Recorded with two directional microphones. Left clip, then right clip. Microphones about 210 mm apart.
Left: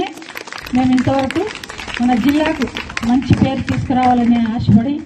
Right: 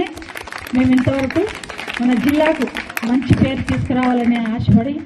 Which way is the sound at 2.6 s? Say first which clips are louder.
Left 1 dB; 50° right (ahead or behind).